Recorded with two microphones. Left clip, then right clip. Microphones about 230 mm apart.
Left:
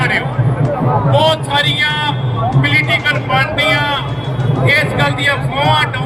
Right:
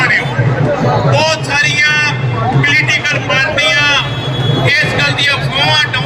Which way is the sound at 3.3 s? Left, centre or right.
Right.